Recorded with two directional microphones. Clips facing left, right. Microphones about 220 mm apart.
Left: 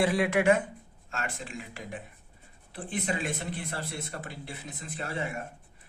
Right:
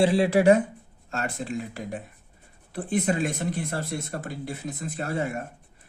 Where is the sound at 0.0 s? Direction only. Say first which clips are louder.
Right 5 dB; 30° right (ahead or behind).